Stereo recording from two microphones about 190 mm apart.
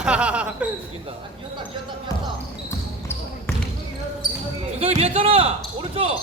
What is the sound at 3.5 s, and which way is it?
Basketball bounce, 10° left (ahead or behind).